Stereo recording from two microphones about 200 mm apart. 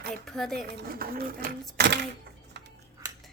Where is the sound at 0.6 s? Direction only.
50° right (ahead or behind).